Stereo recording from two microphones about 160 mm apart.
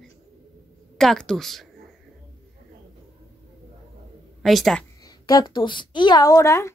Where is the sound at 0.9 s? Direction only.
5° left (ahead or behind).